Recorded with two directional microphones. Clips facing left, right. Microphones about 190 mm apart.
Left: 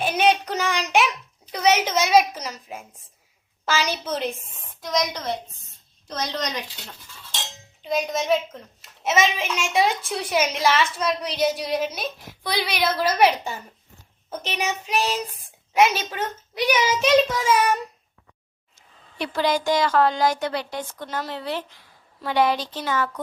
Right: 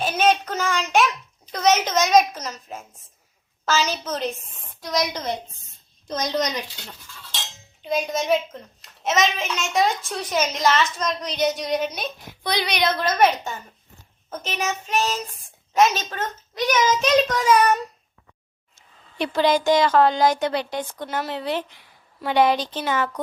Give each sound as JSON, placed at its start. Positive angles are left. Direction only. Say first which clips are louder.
{"t": 0.0, "sound": "child singing", "louder": "even", "side_deg": 15}
{"t": 1.5, "sound": "a woman's voice", "louder": "right 1 dB", "side_deg": 10}
{"t": 4.8, "sound": "a woman's voice", "louder": "even", "side_deg": -5}
{"t": 7.8, "sound": "a woman's voice", "louder": "even", "side_deg": 0}
{"t": 19.2, "sound": "a woman's voice", "louder": "right 3 dB", "side_deg": -20}